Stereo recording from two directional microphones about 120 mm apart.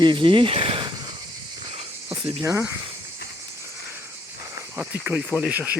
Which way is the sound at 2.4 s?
20° right (ahead or behind).